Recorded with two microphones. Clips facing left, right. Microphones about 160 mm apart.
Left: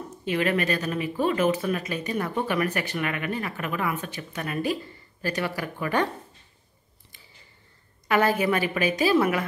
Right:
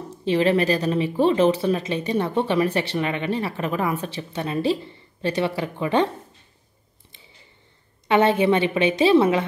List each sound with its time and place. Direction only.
0.1 s speech: 30° right (ahead or behind)
8.1 s speech: 25° right (ahead or behind)